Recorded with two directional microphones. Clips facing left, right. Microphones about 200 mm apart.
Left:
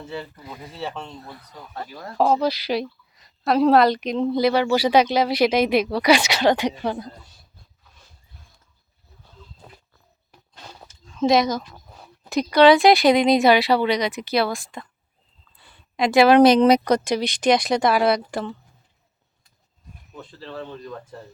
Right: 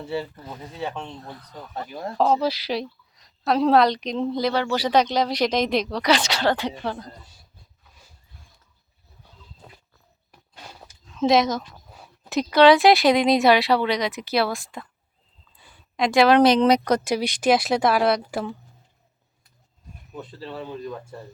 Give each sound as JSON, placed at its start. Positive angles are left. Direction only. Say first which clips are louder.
{"t": 0.4, "sound": "a woman's voice", "louder": "right 1 dB", "side_deg": 10}
{"t": 1.7, "sound": "speech", "louder": "right 3 dB", "side_deg": -25}
{"t": 2.1, "sound": "a woman's voice", "louder": "left 1 dB", "side_deg": 5}
{"t": 11.1, "sound": "speech", "louder": "left 1 dB", "side_deg": 0}
{"t": 15.5, "sound": "a sound", "louder": "right 1 dB", "side_deg": -10}
{"t": 16.0, "sound": "speech", "louder": "left 3 dB", "side_deg": 5}
{"t": 20.1, "sound": "speech", "louder": "right 1 dB", "side_deg": -15}